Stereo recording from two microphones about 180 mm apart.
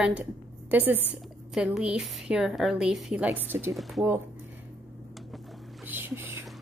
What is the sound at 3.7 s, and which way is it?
Speech, centre (ahead or behind).